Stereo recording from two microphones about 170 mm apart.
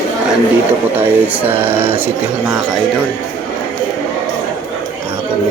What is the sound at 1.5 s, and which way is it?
Speech, 35° right (ahead or behind).